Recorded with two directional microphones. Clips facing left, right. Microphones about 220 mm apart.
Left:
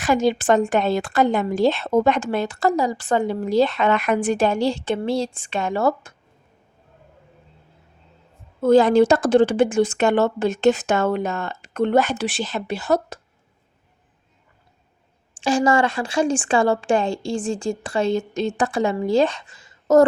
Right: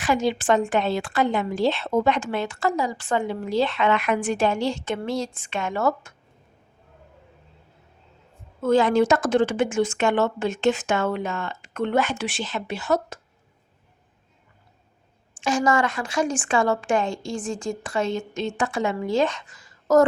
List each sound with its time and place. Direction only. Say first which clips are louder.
0.0 s a woman's voice: left 4 dB; 40° left (ahead or behind)
8.6 s a woman's voice: left 5 dB; 35° left (ahead or behind)
15.4 s a woman's voice: left 3 dB; 30° left (ahead or behind)